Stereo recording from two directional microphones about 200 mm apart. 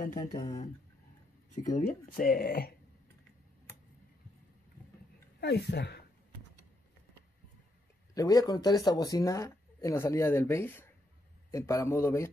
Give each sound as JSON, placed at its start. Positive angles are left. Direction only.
{"t": 0.1, "sound": "speech", "side_deg": 20}
{"t": 1.5, "sound": "speech", "side_deg": 40}
{"t": 5.4, "sound": "speech", "side_deg": 60}
{"t": 8.1, "sound": "speech", "side_deg": 20}